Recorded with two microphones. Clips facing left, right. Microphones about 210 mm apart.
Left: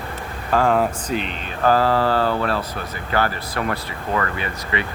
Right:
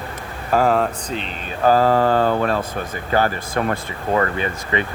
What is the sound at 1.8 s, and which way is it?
Speech, 45° right (ahead or behind).